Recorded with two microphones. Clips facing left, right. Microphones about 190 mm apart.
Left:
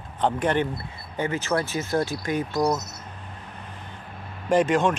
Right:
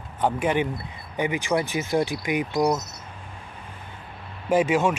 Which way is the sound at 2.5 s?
Centre (ahead or behind).